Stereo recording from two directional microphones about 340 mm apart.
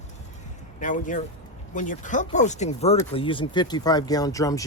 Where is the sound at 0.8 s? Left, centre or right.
Left.